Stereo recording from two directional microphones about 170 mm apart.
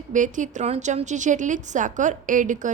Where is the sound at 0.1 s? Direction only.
45° right (ahead or behind).